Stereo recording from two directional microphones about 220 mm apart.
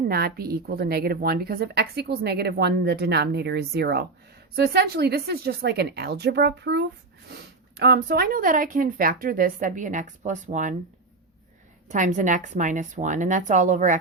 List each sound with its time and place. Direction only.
0.0 s a woman's voice: 45° right (ahead or behind)
11.9 s a woman's voice: 35° right (ahead or behind)